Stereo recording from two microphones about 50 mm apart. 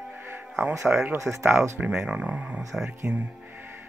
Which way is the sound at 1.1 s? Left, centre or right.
Right.